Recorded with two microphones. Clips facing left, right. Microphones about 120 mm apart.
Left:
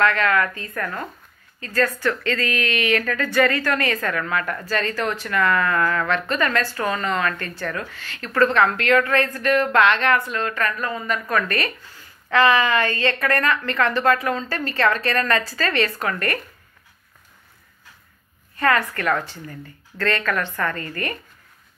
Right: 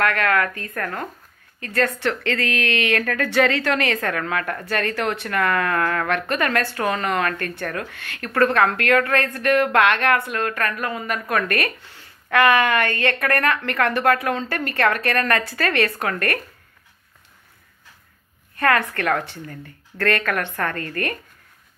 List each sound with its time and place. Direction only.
0.0 s a woman's voice: 60° right (ahead or behind)
1.6 s a woman's voice: 70° right (ahead or behind)
18.6 s a woman's voice: 60° right (ahead or behind)